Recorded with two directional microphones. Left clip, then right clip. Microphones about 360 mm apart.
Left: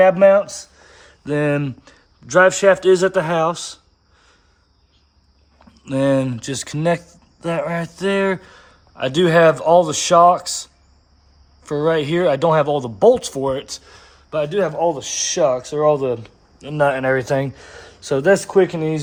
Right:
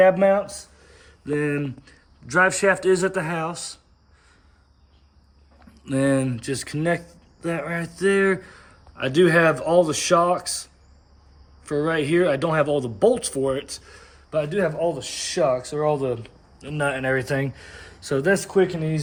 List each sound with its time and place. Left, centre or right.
0.3 s speech: left
5.5 s speech: centre
7.4 s speech: left
7.9 s speech: centre
11.8 s speech: centre
17.2 s speech: left
17.5 s a man's voice: centre